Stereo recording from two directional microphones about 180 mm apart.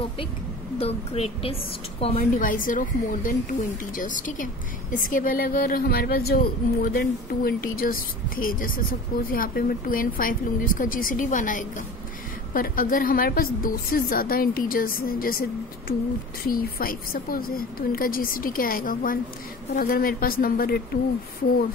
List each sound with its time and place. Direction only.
0.7 s a woman's voice: 35° left (ahead or behind)
2.1 s a woman's voice: 50° left (ahead or behind)